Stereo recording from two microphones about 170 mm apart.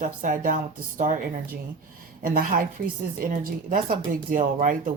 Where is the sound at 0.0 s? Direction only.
50° right (ahead or behind).